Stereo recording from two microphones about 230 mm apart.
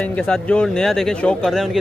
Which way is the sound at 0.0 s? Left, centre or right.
Centre.